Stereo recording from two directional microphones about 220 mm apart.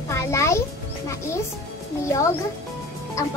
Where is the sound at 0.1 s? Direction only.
10° left (ahead or behind).